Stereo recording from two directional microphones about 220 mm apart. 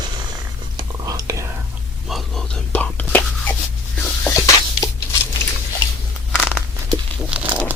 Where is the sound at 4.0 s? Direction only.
10° left (ahead or behind).